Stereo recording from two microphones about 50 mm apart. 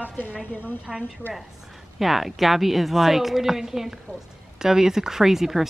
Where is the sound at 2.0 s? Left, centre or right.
Centre.